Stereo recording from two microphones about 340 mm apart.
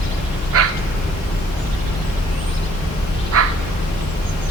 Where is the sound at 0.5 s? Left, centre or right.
Right.